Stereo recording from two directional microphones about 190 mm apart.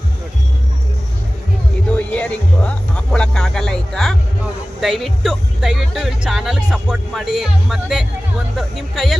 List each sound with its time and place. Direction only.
1.9 s speech: 5° left (ahead or behind)